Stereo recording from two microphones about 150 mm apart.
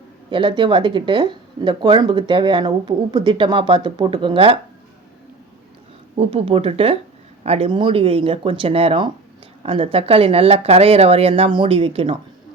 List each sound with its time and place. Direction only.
0.3 s speech: 35° right (ahead or behind)
6.1 s speech: 40° right (ahead or behind)